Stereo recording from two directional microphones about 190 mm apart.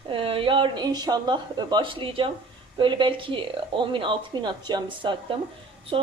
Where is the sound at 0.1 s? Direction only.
30° right (ahead or behind).